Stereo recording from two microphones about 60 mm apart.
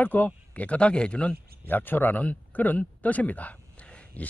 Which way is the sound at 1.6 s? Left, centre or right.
Left.